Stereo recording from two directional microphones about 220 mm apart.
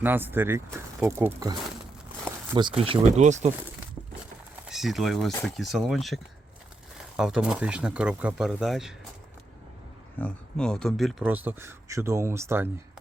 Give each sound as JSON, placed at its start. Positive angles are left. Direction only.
{"t": 0.0, "sound": "speech", "side_deg": -10}
{"t": 4.7, "sound": "speech", "side_deg": 0}
{"t": 7.2, "sound": "speech", "side_deg": -5}
{"t": 10.2, "sound": "speech", "side_deg": 5}